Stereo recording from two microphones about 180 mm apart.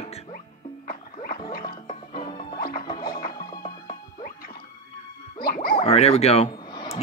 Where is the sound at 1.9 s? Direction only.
25° left (ahead or behind).